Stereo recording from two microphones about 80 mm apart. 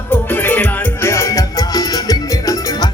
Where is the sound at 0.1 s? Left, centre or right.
Left.